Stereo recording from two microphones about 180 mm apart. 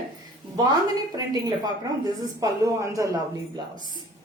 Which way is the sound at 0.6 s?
20° right (ahead or behind).